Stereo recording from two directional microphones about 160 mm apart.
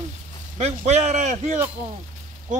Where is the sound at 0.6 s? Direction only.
45° right (ahead or behind).